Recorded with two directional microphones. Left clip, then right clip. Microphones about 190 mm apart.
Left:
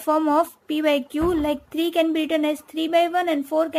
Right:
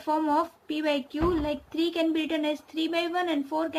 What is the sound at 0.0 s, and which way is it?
Speech, 45° left (ahead or behind).